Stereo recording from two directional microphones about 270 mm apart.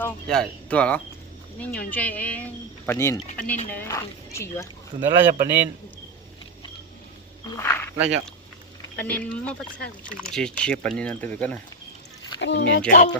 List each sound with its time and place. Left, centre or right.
0.0 s speech: centre
4.9 s speech: centre
7.5 s speech: centre
7.9 s speech: centre
9.8 s speech: left
10.2 s speech: centre
12.4 s speech: left
12.9 s speech: left